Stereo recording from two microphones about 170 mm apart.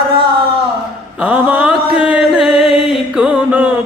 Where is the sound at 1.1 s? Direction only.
5° right (ahead or behind).